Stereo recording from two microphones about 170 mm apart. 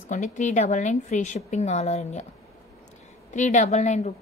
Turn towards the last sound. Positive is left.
turn(degrees=40)  # may be behind; listen again after turning